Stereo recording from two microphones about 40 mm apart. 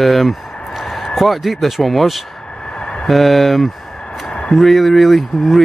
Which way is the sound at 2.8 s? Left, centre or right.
Left.